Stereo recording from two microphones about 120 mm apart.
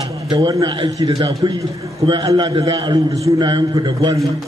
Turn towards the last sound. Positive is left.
turn(degrees=-35)  # may be behind; listen again after turning